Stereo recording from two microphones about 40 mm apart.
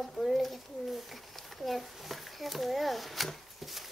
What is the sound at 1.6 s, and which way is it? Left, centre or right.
A child's voice, centre.